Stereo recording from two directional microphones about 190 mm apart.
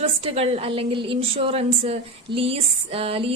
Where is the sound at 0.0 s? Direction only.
30° right (ahead or behind).